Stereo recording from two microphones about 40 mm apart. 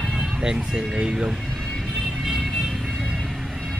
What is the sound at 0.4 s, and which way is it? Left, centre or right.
Speech, centre.